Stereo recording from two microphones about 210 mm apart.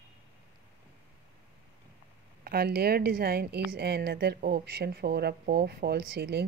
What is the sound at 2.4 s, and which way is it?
Speech, 45° right (ahead or behind).